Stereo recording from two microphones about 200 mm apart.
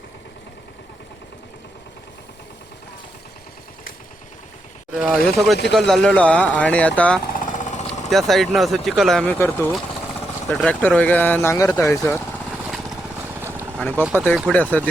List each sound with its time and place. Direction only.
4.9 s speech: centre (ahead or behind)
7.3 s jackhammer: 40° left (ahead or behind)
7.9 s speech: centre (ahead or behind)
11.9 s vehicle: 5° left (ahead or behind)
13.7 s speech: 5° left (ahead or behind)
14.0 s speech: 5° right (ahead or behind)